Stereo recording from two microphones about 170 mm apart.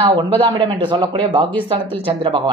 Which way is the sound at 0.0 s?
35° right (ahead or behind).